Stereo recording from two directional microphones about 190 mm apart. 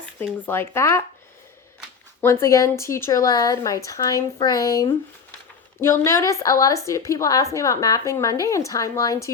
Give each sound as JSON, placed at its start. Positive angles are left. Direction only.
{"t": 0.0, "sound": "a woman's voice", "side_deg": 10}
{"t": 2.2, "sound": "a woman's voice", "side_deg": 15}